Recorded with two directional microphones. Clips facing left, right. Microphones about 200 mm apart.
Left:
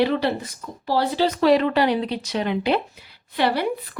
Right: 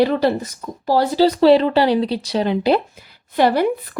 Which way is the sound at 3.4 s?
45° right (ahead or behind).